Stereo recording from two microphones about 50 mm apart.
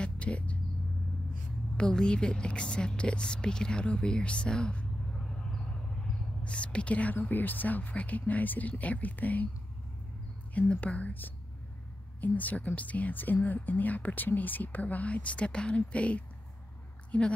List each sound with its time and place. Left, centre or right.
0.0 s vehicle: left
1.8 s a woman's voice: centre
6.4 s a woman's voice: left
7.2 s a woman's voice: left
10.5 s a woman's voice: left